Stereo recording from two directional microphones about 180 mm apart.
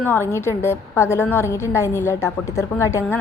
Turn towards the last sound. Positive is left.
turn(degrees=15)  # may be behind; listen again after turning